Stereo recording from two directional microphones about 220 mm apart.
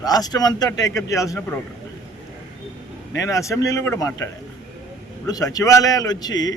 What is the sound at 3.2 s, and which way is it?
Speech, 15° left (ahead or behind).